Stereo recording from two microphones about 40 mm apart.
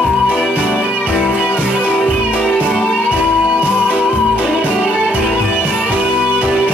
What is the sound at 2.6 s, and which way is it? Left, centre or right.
Music, centre.